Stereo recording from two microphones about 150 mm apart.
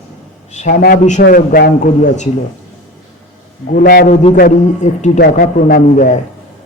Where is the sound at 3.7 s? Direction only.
80° left.